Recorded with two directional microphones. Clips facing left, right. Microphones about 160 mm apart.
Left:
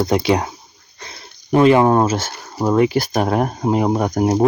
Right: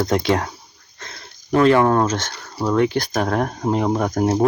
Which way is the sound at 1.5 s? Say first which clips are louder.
Left 2 dB; 15° left (ahead or behind).